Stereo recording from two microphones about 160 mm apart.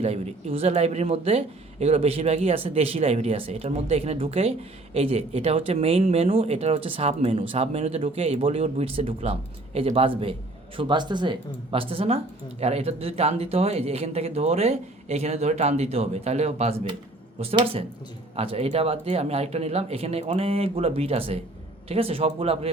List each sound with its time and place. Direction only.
0.0 s speech: 40° right (ahead or behind)
17.4 s speech: 30° right (ahead or behind)